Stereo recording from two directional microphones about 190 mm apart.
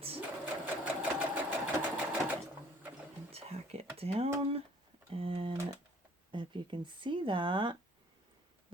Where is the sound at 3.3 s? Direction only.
30° right (ahead or behind).